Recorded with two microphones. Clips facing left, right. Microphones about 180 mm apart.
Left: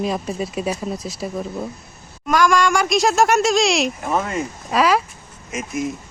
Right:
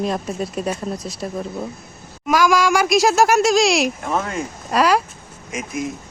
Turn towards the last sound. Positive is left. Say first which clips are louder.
# left 1 dB
turn(degrees=0)  # may be behind; listen again after turning